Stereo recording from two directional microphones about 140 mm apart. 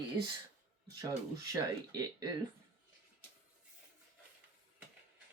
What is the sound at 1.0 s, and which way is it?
Speech, 25° right (ahead or behind).